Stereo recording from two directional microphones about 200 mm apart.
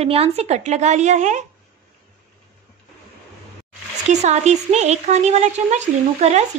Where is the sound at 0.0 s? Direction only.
30° right (ahead or behind).